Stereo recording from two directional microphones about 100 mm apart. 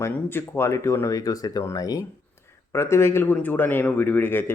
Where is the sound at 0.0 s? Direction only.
25° left (ahead or behind).